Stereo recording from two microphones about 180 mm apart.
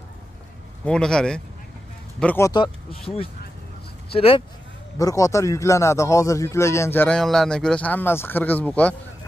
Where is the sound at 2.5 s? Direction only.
30° left (ahead or behind).